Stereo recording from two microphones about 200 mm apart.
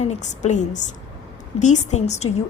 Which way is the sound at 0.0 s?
35° left (ahead or behind).